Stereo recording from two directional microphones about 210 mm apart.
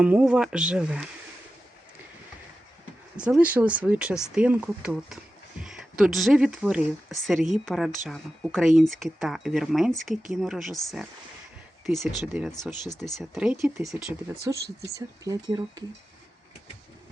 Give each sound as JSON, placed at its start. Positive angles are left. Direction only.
{"t": 0.0, "sound": "speech", "side_deg": -5}
{"t": 3.2, "sound": "speech", "side_deg": -5}